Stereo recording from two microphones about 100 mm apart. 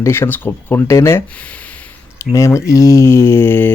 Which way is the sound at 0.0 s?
25° left (ahead or behind).